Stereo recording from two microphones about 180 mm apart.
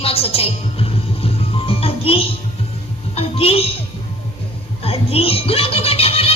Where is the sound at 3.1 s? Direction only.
30° left (ahead or behind).